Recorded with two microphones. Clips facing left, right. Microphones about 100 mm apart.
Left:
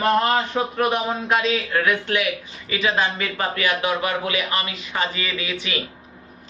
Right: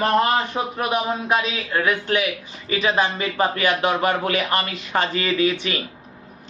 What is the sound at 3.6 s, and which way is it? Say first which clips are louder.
Speech: right 2 dB; 40° right (ahead or behind).